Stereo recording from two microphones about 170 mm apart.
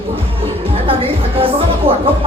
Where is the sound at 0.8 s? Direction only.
35° right (ahead or behind).